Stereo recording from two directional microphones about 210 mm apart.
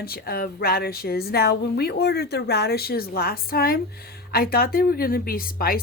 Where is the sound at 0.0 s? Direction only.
45° left (ahead or behind).